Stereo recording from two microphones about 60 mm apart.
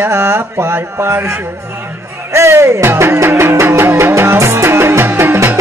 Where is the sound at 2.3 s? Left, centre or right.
Right.